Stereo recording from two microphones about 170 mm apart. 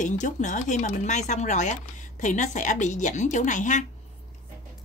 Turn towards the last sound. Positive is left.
turn(degrees=45)  # may be behind; listen again after turning